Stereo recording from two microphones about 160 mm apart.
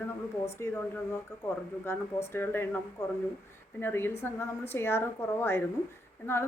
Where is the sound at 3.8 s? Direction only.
15° left (ahead or behind).